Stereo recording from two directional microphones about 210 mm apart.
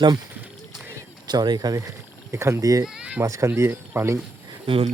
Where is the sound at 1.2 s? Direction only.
20° right (ahead or behind).